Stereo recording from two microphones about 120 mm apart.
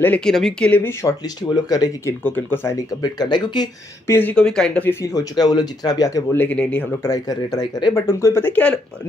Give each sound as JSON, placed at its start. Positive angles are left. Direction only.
{"t": 0.0, "sound": "speech", "side_deg": 10}
{"t": 1.0, "sound": "speech", "side_deg": 35}
{"t": 2.2, "sound": "speech", "side_deg": 15}
{"t": 2.9, "sound": "speech", "side_deg": 35}
{"t": 4.1, "sound": "speech", "side_deg": 15}
{"t": 5.0, "sound": "speech", "side_deg": 30}
{"t": 6.3, "sound": "speech", "side_deg": 15}
{"t": 7.0, "sound": "speech", "side_deg": 30}